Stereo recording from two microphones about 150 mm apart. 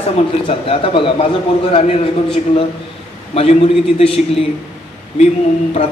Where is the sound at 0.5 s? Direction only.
35° left (ahead or behind).